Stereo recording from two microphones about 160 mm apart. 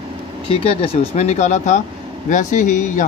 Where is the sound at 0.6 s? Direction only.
35° left (ahead or behind).